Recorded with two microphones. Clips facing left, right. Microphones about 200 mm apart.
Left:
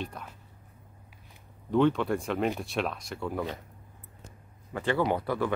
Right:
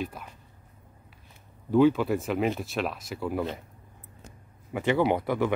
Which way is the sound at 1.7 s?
5° right (ahead or behind).